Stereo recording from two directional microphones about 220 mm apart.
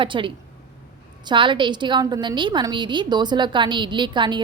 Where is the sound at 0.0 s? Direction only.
20° right (ahead or behind).